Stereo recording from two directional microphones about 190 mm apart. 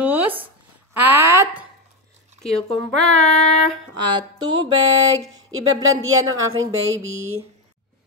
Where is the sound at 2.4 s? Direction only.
Centre (ahead or behind).